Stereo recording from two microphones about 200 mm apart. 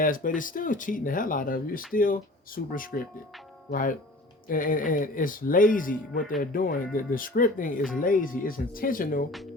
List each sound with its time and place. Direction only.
0.0 s speech: 40° left (ahead or behind)